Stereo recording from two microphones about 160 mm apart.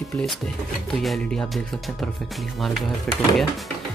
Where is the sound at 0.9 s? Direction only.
5° left (ahead or behind).